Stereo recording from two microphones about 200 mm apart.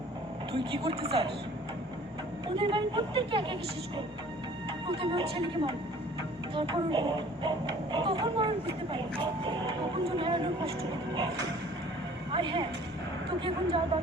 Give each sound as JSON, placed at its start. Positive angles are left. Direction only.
{"t": 0.5, "sound": "speech", "side_deg": -25}
{"t": 2.6, "sound": "speech", "side_deg": -25}
{"t": 12.3, "sound": "speech", "side_deg": -25}